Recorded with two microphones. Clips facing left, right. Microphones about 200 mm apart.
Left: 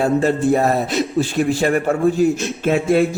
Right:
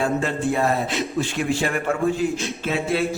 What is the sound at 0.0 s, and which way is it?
Speech, 40° left (ahead or behind).